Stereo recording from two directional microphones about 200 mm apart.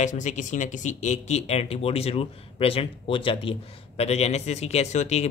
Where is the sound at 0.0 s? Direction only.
35° left (ahead or behind).